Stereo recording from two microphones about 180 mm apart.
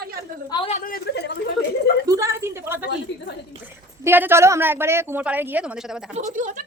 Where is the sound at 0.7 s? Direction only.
50° left (ahead or behind).